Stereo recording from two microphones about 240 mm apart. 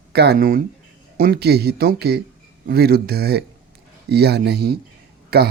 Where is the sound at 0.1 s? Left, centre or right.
Right.